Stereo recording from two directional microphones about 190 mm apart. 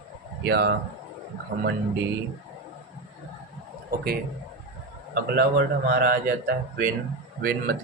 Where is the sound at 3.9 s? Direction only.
50° right (ahead or behind).